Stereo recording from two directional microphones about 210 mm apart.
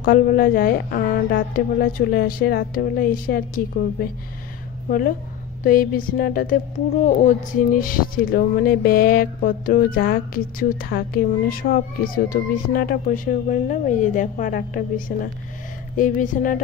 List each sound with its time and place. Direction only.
0.0 s a woman's voice: 45° left (ahead or behind)